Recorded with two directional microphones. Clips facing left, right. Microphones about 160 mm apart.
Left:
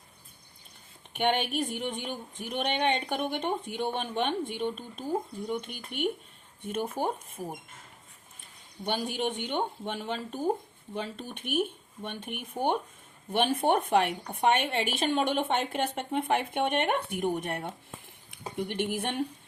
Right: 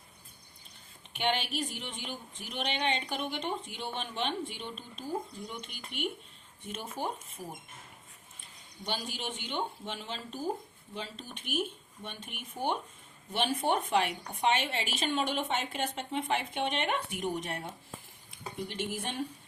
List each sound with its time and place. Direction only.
1.1 s speech: 55° left (ahead or behind)
8.8 s a woman's voice: 55° left (ahead or behind)